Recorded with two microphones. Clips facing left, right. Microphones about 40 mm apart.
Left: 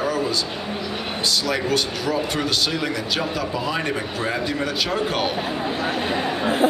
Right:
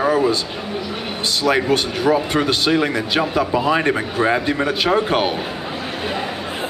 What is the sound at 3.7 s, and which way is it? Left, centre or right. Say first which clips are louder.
Speech: right 6 dB; right.